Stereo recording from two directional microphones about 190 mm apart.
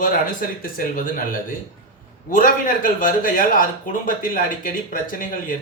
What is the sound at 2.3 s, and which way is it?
Speech, 45° left (ahead or behind).